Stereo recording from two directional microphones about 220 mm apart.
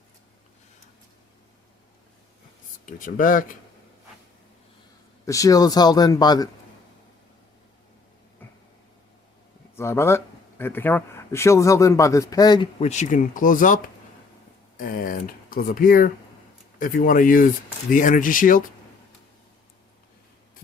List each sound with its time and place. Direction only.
3.0 s speech: 35° left (ahead or behind)
5.2 s speech: 15° left (ahead or behind)
9.7 s speech: 10° left (ahead or behind)
12.8 s speech: 30° left (ahead or behind)